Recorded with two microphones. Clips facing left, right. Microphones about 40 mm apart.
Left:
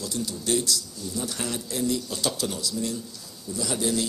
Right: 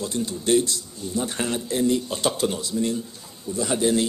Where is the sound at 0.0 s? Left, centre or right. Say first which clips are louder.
Right 4 dB; right.